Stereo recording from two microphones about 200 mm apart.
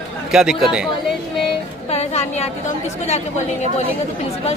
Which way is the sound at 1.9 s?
30° left (ahead or behind).